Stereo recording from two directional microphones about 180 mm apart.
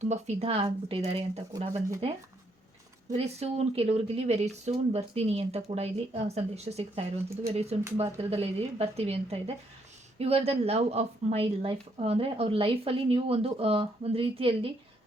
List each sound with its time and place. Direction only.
0.0 s a woman's voice: 40° right (ahead or behind)
3.1 s a woman's voice: 35° right (ahead or behind)